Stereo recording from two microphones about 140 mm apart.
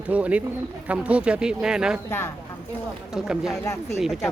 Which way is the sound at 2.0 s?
15° left (ahead or behind).